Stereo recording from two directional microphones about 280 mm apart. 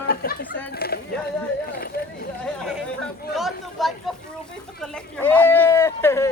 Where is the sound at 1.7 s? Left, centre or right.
Left.